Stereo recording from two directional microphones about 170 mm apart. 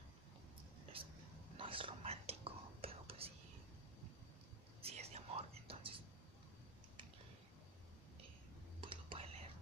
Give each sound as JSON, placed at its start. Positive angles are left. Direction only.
{"t": 1.0, "sound": "a sound", "side_deg": -30}
{"t": 1.6, "sound": "whispering", "side_deg": -30}
{"t": 4.8, "sound": "whispering", "side_deg": -40}
{"t": 8.8, "sound": "whispering", "side_deg": -30}